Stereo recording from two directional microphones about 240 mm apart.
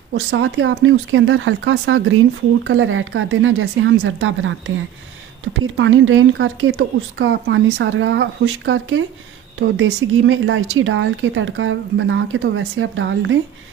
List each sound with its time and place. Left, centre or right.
0.1 s speech: right